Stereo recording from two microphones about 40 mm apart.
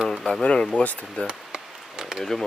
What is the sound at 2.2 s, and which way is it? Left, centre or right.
Speech, centre.